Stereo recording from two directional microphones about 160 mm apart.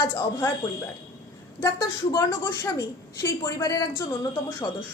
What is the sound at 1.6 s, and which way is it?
A woman's voice, 25° left (ahead or behind).